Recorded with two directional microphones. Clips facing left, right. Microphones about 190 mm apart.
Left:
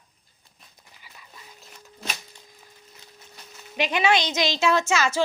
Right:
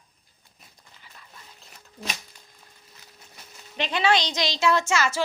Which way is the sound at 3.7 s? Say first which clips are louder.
Left 1 dB; 15° left (ahead or behind).